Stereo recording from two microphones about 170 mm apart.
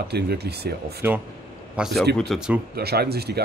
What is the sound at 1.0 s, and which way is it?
Speech, 15° right (ahead or behind).